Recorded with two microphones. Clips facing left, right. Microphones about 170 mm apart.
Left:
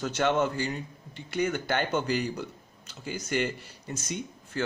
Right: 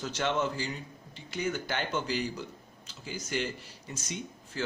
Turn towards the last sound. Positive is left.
turn(degrees=55)  # may be behind; listen again after turning